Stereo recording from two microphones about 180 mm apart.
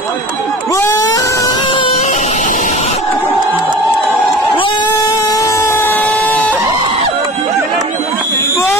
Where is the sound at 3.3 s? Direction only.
Centre (ahead or behind).